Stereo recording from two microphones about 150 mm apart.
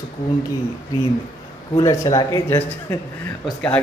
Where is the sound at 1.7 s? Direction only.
20° left (ahead or behind).